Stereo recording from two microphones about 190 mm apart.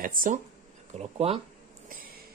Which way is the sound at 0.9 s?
35° right (ahead or behind).